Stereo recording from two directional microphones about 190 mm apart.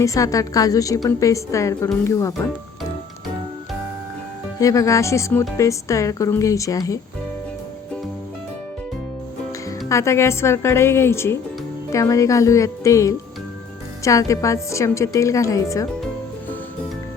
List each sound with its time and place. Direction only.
0.0 s a woman's voice: 15° left (ahead or behind)
4.6 s a woman's voice: 15° left (ahead or behind)
9.5 s a woman's voice: 15° left (ahead or behind)